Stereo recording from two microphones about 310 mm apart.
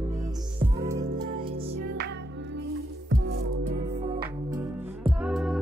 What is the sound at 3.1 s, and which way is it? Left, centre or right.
Music, right.